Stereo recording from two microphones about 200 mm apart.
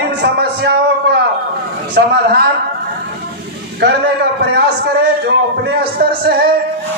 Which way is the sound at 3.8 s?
55° right (ahead or behind).